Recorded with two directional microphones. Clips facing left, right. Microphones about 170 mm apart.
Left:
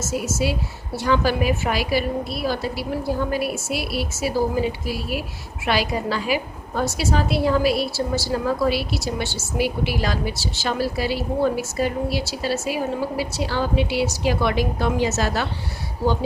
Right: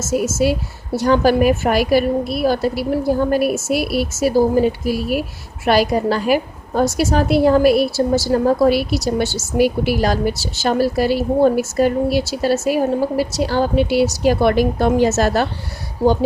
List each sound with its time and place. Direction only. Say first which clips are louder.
0.1 s a woman's voice: right 8 dB; 55° right (ahead or behind)
0.9 s a woman's voice: right 7 dB; 45° right (ahead or behind)